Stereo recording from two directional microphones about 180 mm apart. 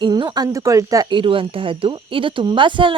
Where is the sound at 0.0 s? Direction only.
25° right (ahead or behind).